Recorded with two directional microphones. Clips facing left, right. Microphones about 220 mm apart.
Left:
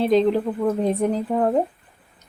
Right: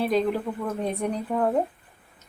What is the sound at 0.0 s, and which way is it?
Speech, 25° left (ahead or behind).